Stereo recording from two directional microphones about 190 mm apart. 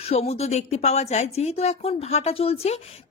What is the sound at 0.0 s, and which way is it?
A woman's voice, 35° left (ahead or behind).